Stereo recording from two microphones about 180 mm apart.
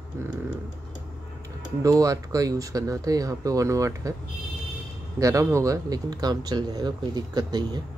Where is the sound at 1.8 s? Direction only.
20° right (ahead or behind).